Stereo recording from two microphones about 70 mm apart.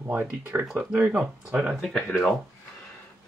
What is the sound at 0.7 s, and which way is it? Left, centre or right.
Speech, centre.